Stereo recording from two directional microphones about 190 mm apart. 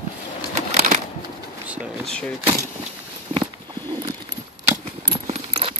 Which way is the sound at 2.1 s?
5° left (ahead or behind).